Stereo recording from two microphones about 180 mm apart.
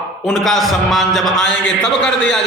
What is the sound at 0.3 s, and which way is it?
A man's voice, centre (ahead or behind).